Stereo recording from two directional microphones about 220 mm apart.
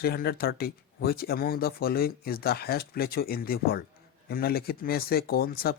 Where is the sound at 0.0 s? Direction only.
45° left (ahead or behind).